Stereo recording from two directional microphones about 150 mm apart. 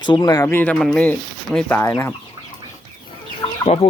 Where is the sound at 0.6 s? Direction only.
5° left (ahead or behind).